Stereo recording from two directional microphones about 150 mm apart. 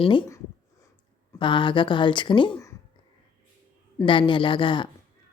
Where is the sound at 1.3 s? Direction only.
35° left (ahead or behind).